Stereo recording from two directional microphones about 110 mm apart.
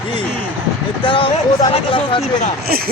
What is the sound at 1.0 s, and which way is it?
Speech, 50° left (ahead or behind).